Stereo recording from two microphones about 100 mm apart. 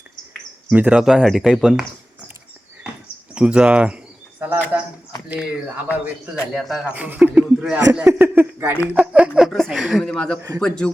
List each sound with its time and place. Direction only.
0.7 s speech: 15° right (ahead or behind)
1.0 s speech: centre (ahead or behind)
3.3 s speech: 10° right (ahead or behind)
5.4 s speech: 10° right (ahead or behind)
6.8 s speech: 15° right (ahead or behind)
8.2 s a man's voice: 20° right (ahead or behind); by 10.9 s 5° left (ahead or behind)